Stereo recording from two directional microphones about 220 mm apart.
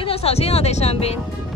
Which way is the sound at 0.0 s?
25° left (ahead or behind).